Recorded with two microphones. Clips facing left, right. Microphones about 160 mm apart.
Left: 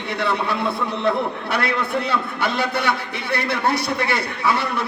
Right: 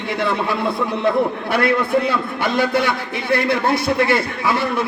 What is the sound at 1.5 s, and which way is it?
A man's voice, 50° right (ahead or behind).